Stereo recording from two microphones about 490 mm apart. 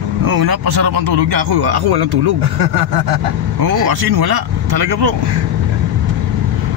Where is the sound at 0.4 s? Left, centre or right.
Right.